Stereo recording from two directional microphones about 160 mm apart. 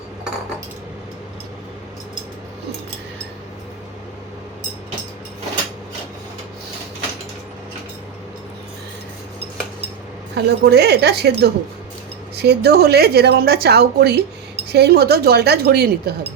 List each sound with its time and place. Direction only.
10.3 s a woman's voice: 90° right